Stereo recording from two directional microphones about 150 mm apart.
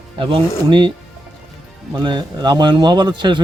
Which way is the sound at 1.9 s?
30° right (ahead or behind).